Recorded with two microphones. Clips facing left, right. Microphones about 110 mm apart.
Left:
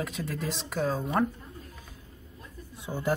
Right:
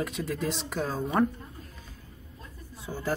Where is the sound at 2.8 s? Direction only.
15° left (ahead or behind).